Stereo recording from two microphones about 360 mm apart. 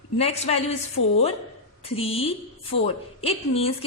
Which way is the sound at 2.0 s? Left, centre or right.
Centre.